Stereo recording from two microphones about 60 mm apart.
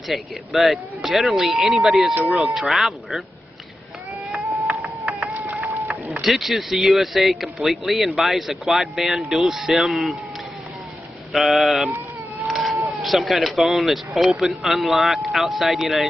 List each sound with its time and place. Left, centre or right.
0.1 s speech: centre
5.3 s a sound: right
6.2 s speech: centre
11.3 s speech: centre
12.4 s a sound: centre
13.0 s speech: centre